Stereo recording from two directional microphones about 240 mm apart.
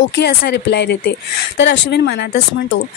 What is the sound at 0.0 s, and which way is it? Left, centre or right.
Speech, left.